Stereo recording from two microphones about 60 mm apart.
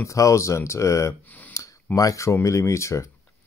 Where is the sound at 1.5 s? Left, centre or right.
Left.